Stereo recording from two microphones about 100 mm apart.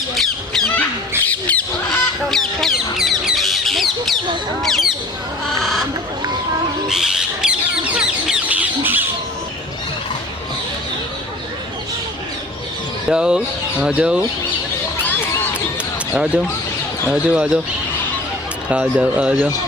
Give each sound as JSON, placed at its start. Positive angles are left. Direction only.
{"t": 0.1, "sound": "squawk", "side_deg": 5}
{"t": 1.2, "sound": "a sound", "side_deg": 15}
{"t": 2.3, "sound": "a sound", "side_deg": 5}
{"t": 6.8, "sound": "bird", "side_deg": -5}
{"t": 13.1, "sound": "speech", "side_deg": -10}
{"t": 16.1, "sound": "speech", "side_deg": -15}
{"t": 18.7, "sound": "speech", "side_deg": -10}